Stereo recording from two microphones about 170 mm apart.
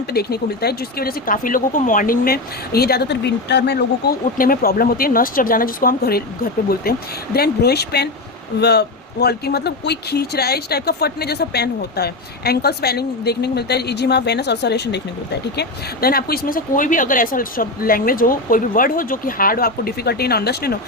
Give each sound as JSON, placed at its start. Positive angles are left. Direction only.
{"t": 0.1, "sound": "speech", "side_deg": 65}
{"t": 4.4, "sound": "speech", "side_deg": 60}